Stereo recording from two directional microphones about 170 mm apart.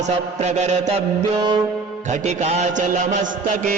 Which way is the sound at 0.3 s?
40° right (ahead or behind).